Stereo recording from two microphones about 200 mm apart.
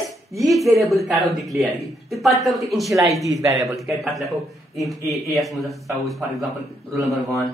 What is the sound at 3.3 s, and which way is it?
Speech, 15° right (ahead or behind).